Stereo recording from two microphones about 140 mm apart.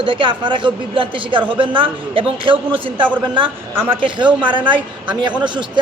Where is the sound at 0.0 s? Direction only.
35° right (ahead or behind).